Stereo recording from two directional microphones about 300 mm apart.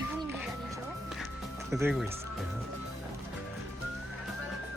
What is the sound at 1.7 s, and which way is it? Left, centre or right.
Speech, centre.